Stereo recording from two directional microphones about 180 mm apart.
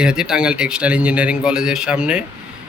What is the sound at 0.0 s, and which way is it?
Speech, 5° right (ahead or behind).